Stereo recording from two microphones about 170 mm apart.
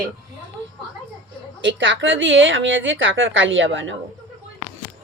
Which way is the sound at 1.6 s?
90° right.